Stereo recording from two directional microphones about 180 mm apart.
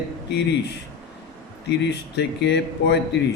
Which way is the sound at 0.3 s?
70° left (ahead or behind).